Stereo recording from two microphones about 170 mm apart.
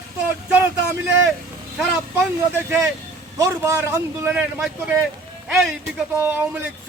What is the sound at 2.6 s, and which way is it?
Speech, 15° right (ahead or behind).